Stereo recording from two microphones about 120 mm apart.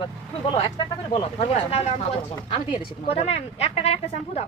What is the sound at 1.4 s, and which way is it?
Speech, 60° left (ahead or behind).